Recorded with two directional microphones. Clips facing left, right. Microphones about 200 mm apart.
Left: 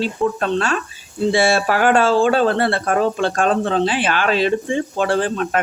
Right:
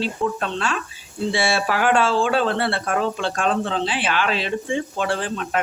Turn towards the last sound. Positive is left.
turn(degrees=45)  # may be behind; listen again after turning